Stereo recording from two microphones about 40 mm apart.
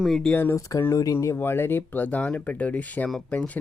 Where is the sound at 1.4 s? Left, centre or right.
Left.